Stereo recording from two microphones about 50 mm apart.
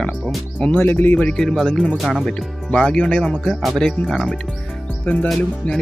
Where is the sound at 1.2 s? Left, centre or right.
Centre.